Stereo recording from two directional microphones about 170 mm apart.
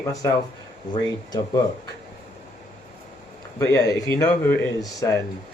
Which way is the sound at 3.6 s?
20° left (ahead or behind).